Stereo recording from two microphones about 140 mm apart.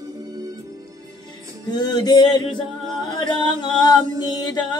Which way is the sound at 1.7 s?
30° left (ahead or behind).